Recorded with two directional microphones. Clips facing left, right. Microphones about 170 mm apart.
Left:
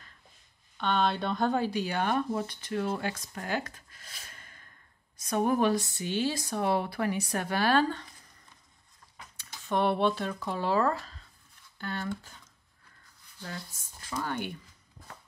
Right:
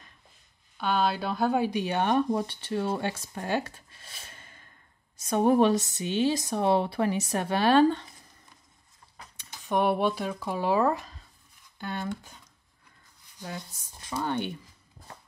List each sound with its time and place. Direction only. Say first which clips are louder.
0.7 s speech: right 1 dB; 5° right (ahead or behind); by 8.0 s 25° right (ahead or behind)
9.4 s speech: right 2 dB; 15° right (ahead or behind)
13.4 s speech: right 3 dB; 20° right (ahead or behind)